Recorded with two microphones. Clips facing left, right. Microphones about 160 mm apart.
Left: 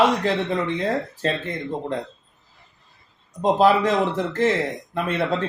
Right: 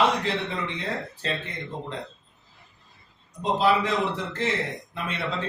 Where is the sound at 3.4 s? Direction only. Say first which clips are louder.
Left 6 dB; 45° left (ahead or behind).